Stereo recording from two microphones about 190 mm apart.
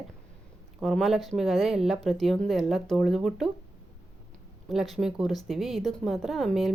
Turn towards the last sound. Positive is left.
turn(degrees=0)  # may be behind; listen again after turning